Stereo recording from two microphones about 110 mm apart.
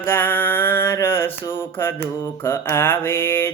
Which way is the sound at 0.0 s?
20° left (ahead or behind).